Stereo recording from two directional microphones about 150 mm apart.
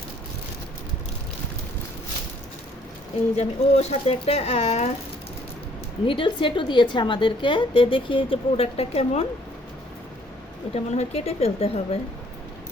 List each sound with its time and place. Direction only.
3.3 s speech: 45° left (ahead or behind)
6.1 s a woman's voice: 35° left (ahead or behind)
10.9 s speech: 45° left (ahead or behind)